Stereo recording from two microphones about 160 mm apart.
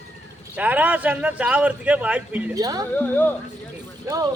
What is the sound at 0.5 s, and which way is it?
Speech, 10° right (ahead or behind).